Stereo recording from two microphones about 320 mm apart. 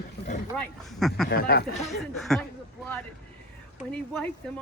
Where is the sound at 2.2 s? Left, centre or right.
Centre.